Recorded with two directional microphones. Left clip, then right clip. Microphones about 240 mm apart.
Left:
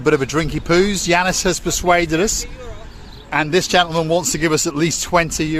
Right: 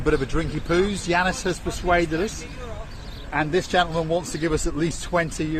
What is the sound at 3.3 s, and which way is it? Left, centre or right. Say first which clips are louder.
Speech: left 6 dB; left.